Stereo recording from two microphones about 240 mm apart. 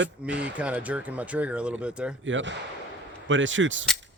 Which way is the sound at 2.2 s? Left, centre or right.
Right.